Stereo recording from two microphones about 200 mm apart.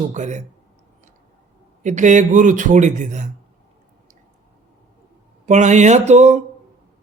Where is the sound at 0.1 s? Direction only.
35° right (ahead or behind).